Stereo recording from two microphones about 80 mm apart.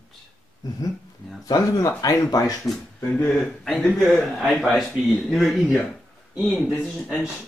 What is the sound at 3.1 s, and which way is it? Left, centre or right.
Speech, centre.